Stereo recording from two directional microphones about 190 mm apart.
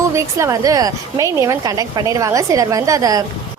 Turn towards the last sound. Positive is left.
turn(degrees=-20)  # may be behind; listen again after turning